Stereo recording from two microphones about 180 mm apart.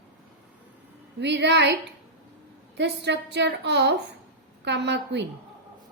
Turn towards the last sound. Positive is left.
turn(degrees=-70)  # may be behind; listen again after turning